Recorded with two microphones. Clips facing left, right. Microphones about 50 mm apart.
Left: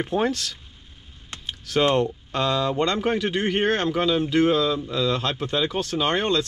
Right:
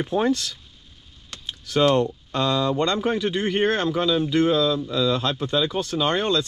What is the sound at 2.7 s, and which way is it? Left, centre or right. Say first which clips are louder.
Speech: even; left.